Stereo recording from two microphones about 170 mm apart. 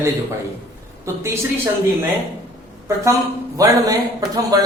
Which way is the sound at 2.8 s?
15° right (ahead or behind).